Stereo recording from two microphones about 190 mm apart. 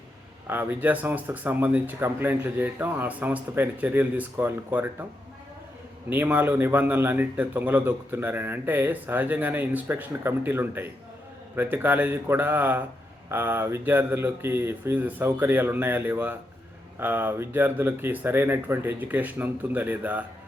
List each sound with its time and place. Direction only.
0.4 s a man's voice: 10° right (ahead or behind)
6.1 s a man's voice: 10° right (ahead or behind)